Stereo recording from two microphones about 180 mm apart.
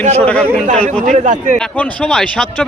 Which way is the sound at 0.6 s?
45° right (ahead or behind).